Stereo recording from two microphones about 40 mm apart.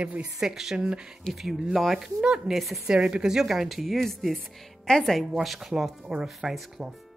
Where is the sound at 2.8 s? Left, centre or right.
Right.